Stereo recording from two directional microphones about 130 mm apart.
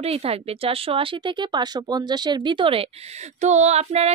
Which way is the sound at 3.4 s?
60° right (ahead or behind).